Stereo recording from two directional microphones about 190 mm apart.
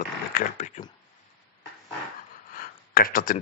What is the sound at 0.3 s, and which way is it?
Speech, 40° left (ahead or behind).